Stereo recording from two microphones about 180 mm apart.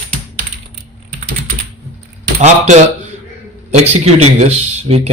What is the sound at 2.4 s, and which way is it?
Speech, 40° right (ahead or behind).